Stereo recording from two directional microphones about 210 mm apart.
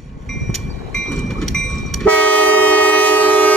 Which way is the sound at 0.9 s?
Centre (ahead or behind).